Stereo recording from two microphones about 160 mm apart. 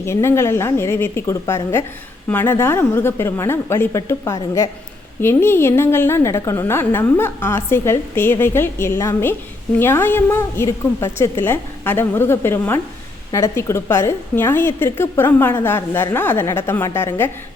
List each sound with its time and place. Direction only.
0.0 s a woman's voice: 15° left (ahead or behind)